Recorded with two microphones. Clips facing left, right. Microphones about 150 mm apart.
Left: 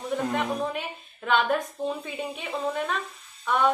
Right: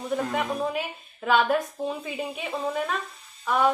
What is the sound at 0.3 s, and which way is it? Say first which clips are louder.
A woman's voice: even; 5° right (ahead or behind).